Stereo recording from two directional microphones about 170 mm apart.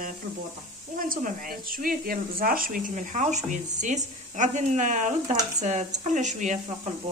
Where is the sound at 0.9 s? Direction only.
55° right (ahead or behind).